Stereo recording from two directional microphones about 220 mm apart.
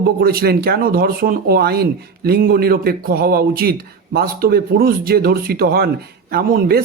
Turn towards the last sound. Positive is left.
turn(degrees=-45)  # may be behind; listen again after turning